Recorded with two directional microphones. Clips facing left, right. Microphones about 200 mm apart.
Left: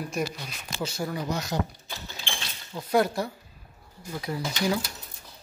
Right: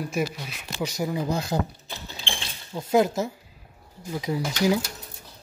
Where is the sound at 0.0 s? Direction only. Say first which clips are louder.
Right 3 dB; 5° right (ahead or behind).